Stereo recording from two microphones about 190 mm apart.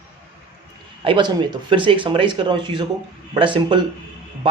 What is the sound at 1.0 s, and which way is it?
Speech, 25° right (ahead or behind).